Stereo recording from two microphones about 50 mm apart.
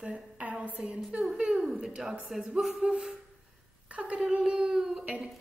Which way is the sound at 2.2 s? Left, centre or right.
Centre.